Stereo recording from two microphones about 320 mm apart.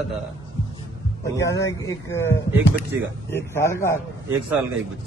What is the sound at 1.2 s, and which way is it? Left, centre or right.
Speech, centre.